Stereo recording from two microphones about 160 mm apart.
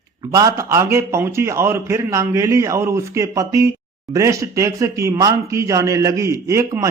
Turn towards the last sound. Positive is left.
turn(degrees=-20)  # may be behind; listen again after turning